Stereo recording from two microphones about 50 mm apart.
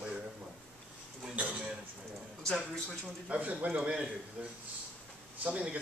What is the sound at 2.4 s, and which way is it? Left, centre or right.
Speech, centre.